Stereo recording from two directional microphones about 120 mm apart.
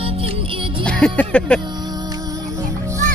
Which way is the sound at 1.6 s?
35° right (ahead or behind).